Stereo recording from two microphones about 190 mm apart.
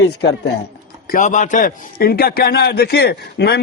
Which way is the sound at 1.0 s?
45° left (ahead or behind).